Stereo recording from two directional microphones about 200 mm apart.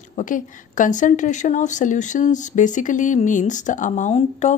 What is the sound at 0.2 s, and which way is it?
A woman's voice, 40° left (ahead or behind).